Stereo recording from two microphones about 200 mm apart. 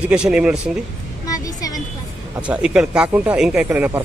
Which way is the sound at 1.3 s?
20° left (ahead or behind).